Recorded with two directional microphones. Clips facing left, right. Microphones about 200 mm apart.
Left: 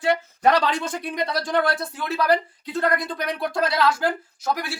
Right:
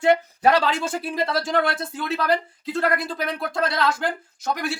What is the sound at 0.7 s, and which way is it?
Speech, 25° right (ahead or behind).